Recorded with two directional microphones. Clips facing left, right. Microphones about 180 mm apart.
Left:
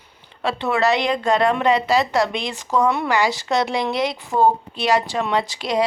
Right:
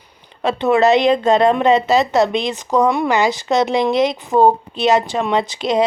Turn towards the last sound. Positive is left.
turn(degrees=-20)  # may be behind; listen again after turning